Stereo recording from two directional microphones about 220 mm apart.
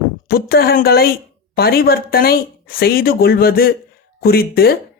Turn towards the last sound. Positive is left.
turn(degrees=45)  # may be behind; listen again after turning